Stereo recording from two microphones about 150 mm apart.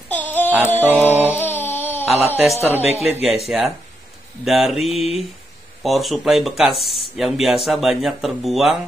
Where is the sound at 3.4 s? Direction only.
Centre (ahead or behind).